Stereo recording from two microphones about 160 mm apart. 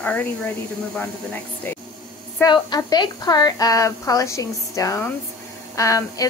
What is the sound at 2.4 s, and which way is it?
A woman's voice, 25° left (ahead or behind).